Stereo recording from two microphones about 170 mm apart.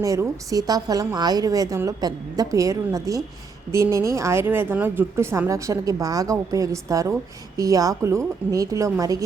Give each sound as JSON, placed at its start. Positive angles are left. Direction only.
{"t": 0.0, "sound": "a woman's voice", "side_deg": -20}